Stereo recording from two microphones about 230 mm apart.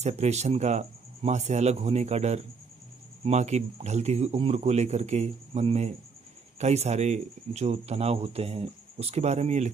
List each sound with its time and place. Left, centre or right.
0.0 s speech: right